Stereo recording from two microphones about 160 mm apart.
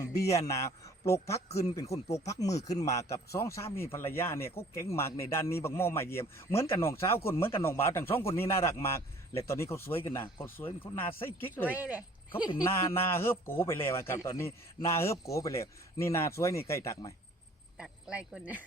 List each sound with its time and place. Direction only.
0.3 s a man's voice: 20° left (ahead or behind)
11.7 s speech: 10° right (ahead or behind)
12.5 s a man's voice: 20° left (ahead or behind)
17.7 s speech: 5° right (ahead or behind)